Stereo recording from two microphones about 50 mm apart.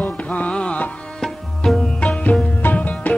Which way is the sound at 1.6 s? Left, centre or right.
Centre.